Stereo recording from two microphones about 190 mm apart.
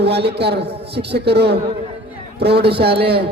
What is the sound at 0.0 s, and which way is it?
A man's voice, 60° right (ahead or behind).